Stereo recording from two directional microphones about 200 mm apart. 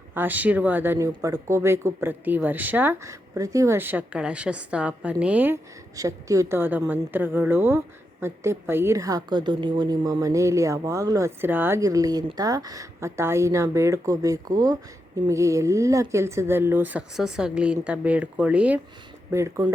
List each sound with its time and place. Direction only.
0.1 s a woman's voice: 10° right (ahead or behind)